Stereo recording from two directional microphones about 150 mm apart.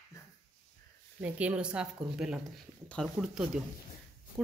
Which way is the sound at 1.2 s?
10° right (ahead or behind).